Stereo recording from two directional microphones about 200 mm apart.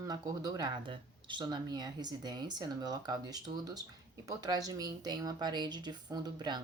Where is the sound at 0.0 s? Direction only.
20° right (ahead or behind).